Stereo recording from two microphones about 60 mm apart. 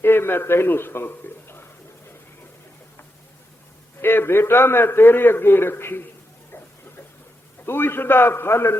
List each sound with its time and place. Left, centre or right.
0.0 s a man's voice: left
4.0 s a man's voice: left
7.6 s a man's voice: left